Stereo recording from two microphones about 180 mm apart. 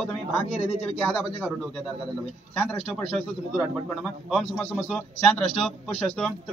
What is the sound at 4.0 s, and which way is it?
Speech, centre (ahead or behind).